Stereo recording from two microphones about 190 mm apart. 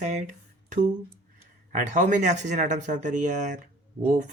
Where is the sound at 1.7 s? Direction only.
40° right (ahead or behind).